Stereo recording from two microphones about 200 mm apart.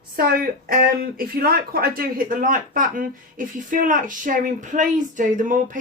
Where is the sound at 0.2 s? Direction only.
45° right (ahead or behind).